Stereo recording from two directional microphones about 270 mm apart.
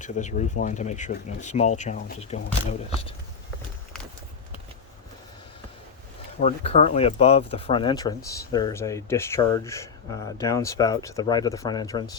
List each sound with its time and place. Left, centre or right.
0.0 s speech: left
6.4 s speech: left